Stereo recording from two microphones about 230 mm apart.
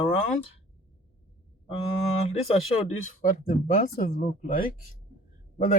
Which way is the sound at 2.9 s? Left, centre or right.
Left.